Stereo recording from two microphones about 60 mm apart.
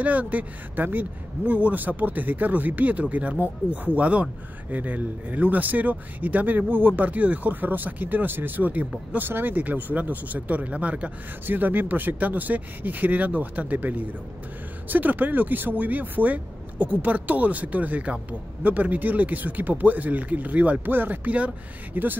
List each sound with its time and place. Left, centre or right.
0.0 s speech: right